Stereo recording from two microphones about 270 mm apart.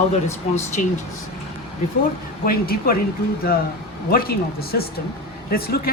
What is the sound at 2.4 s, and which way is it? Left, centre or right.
Speech, left.